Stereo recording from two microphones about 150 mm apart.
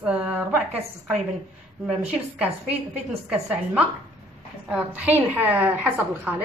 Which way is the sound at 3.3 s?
5° right (ahead or behind).